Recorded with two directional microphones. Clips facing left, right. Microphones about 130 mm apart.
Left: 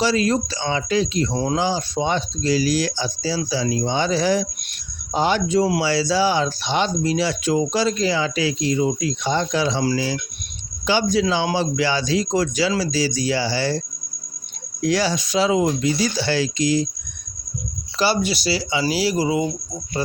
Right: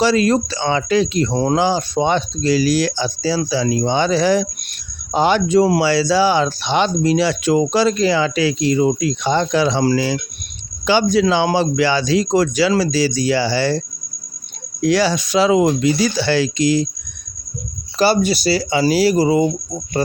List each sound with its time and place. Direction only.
0.0 s speech: 65° right (ahead or behind)
14.8 s speech: 70° right (ahead or behind)
17.9 s speech: 45° right (ahead or behind)